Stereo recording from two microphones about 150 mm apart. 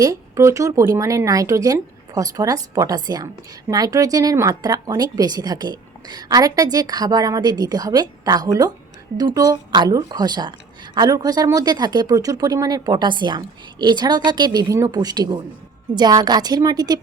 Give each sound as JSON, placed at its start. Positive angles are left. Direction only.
{"t": 0.0, "sound": "speech", "side_deg": -20}